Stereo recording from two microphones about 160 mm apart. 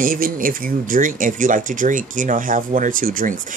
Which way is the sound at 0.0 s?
60° right (ahead or behind).